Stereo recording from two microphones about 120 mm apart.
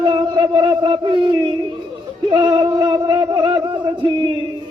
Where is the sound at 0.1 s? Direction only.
40° right (ahead or behind).